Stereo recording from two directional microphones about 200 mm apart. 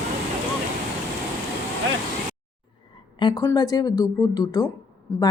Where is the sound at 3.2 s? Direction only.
20° left (ahead or behind).